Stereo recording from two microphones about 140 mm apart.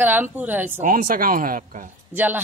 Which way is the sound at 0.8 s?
85° right.